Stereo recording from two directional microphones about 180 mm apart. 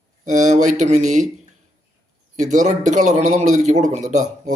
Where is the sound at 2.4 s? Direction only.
40° right (ahead or behind).